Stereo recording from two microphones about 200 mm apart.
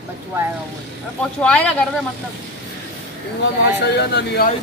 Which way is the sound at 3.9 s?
55° left (ahead or behind).